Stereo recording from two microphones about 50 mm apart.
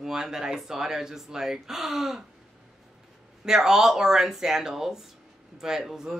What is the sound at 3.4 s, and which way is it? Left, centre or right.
Speech, centre.